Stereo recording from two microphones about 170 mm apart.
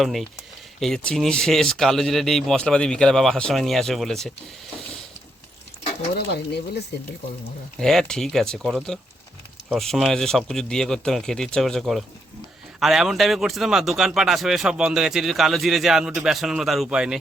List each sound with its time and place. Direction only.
0.0 s speech: centre (ahead or behind)
6.1 s speech: 75° left (ahead or behind)
7.8 s speech: 5° left (ahead or behind)